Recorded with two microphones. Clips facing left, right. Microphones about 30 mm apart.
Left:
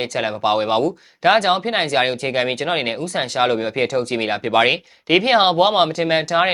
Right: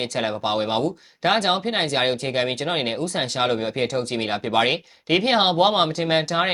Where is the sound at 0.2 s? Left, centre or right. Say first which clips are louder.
Left 5 dB; centre.